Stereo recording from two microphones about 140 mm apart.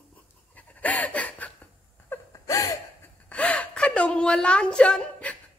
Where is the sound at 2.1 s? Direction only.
25° left (ahead or behind).